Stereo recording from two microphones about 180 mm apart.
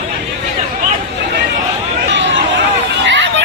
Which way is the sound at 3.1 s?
80° right.